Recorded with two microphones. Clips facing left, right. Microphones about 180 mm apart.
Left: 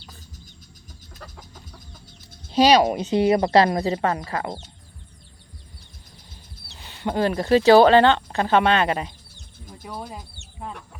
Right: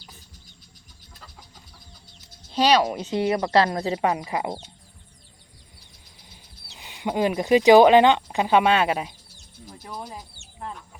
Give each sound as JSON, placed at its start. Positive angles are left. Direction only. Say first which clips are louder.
{"t": 1.2, "sound": "chicken", "louder": "left 6 dB", "side_deg": 45}
{"t": 2.5, "sound": "speech", "louder": "left 4 dB", "side_deg": 15}
{"t": 3.8, "sound": "speech", "louder": "left 3 dB", "side_deg": 0}
{"t": 4.0, "sound": "speech", "louder": "even", "side_deg": -15}
{"t": 6.7, "sound": "speech", "louder": "left 1 dB", "side_deg": -15}
{"t": 9.9, "sound": "speech", "louder": "left 2 dB", "side_deg": 10}